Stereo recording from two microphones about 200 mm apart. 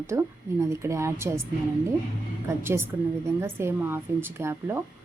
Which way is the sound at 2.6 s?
10° right (ahead or behind).